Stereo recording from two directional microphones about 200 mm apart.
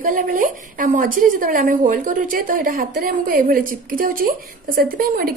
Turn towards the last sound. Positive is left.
turn(degrees=-50)  # may be behind; listen again after turning